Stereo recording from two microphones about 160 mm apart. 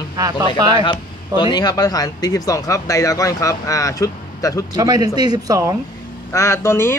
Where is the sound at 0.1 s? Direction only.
25° right (ahead or behind).